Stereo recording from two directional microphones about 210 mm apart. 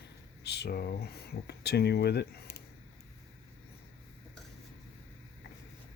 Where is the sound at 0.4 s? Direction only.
50° left (ahead or behind).